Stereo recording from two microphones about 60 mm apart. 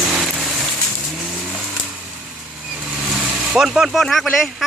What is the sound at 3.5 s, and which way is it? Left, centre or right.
Speech, centre.